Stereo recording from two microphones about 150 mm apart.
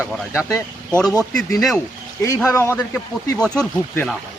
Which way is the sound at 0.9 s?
5° left (ahead or behind).